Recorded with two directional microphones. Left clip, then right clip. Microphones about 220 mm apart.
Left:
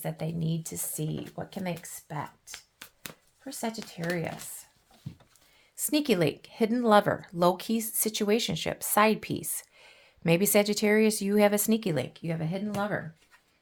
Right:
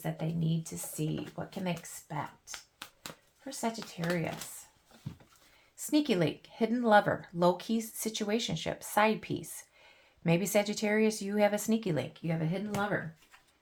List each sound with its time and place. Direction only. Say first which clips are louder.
0.0 s speech: left 2 dB; 45° left (ahead or behind)
4.0 s speech: left 2 dB; 35° left (ahead or behind)
5.7 s speech: left 3 dB; 45° left (ahead or behind)